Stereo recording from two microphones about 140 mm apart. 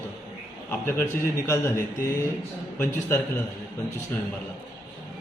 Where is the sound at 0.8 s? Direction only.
20° left (ahead or behind).